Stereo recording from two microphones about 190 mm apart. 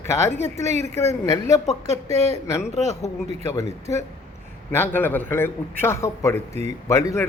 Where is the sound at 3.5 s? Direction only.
15° left (ahead or behind).